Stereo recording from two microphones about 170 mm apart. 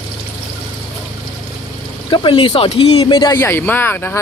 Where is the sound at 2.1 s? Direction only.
30° left (ahead or behind); by 4.2 s 10° left (ahead or behind).